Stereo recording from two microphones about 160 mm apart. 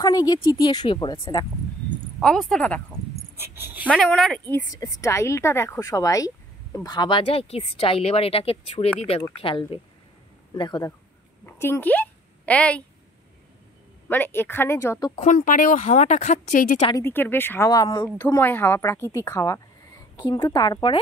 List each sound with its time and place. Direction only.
0.0 s a woman's voice: 25° left (ahead or behind)
2.1 s speech: centre (ahead or behind)
3.3 s speech: 15° right (ahead or behind)
3.9 s speech: 5° left (ahead or behind)
4.6 s a woman's voice: 20° left (ahead or behind)
11.4 s a sound: 15° left (ahead or behind)
14.0 s speech: 15° left (ahead or behind)
15.1 s speech: 50° left (ahead or behind)
16.9 s speech: 15° left (ahead or behind)
18.1 s a woman's voice: 10° left (ahead or behind); by 21.0 s 30° left (ahead or behind)